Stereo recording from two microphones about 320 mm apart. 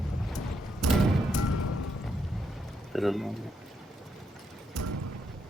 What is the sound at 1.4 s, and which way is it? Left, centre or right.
Music, left.